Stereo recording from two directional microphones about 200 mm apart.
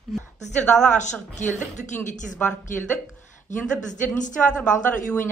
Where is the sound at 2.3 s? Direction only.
10° left (ahead or behind).